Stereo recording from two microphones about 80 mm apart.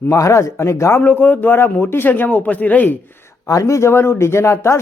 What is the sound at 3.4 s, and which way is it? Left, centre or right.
Speech, left.